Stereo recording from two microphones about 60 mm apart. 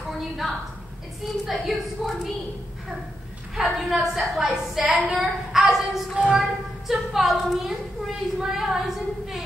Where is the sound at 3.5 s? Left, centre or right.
Centre.